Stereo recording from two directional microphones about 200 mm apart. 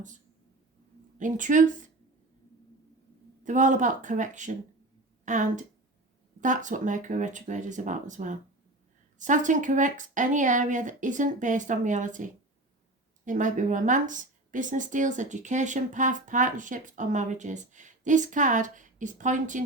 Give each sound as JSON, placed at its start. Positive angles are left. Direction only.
{"t": 1.2, "sound": "speech", "side_deg": -40}
{"t": 3.4, "sound": "a woman's voice", "side_deg": -40}